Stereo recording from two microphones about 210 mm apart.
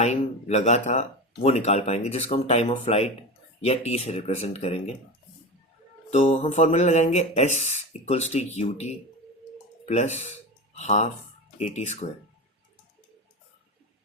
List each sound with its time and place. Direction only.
0.0 s speech: 30° left (ahead or behind)
6.1 s speech: 30° left (ahead or behind)